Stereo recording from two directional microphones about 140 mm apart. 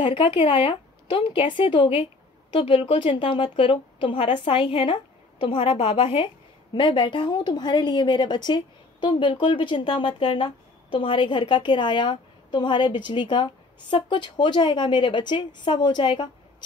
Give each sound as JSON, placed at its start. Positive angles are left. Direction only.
{"t": 0.0, "sound": "a woman's voice", "side_deg": 40}